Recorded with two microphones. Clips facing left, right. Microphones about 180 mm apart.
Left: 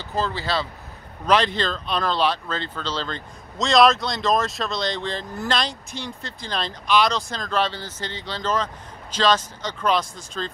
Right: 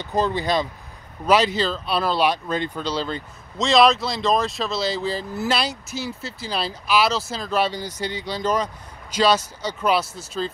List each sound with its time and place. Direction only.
0.0 s speech: 20° right (ahead or behind)